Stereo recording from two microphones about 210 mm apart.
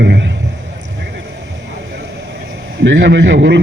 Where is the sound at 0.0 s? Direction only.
55° right (ahead or behind).